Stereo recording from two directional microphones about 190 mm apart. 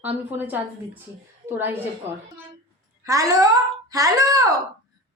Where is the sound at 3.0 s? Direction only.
15° right (ahead or behind).